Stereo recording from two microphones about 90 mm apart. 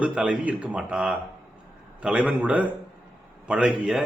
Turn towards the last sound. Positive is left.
turn(degrees=-5)  # may be behind; listen again after turning